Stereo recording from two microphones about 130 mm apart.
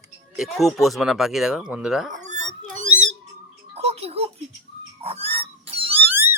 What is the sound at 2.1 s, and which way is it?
Dog, 65° right (ahead or behind).